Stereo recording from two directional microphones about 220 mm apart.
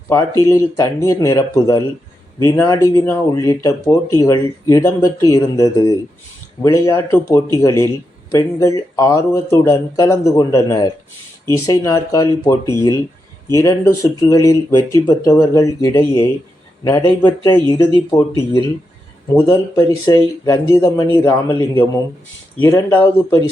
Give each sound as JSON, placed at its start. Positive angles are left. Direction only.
{"t": 0.1, "sound": "speech", "side_deg": 15}
{"t": 19.4, "sound": "speech", "side_deg": 15}